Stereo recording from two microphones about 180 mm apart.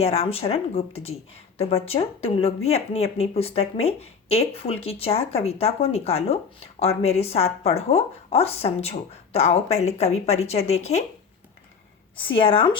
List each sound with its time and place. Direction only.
0.0 s speech: 35° left (ahead or behind)
12.1 s speech: 30° left (ahead or behind)